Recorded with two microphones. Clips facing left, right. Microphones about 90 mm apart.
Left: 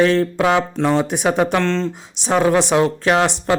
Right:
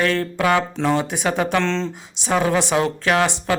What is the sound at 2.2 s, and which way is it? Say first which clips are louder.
Speech: left 4 dB; 15° left (ahead or behind).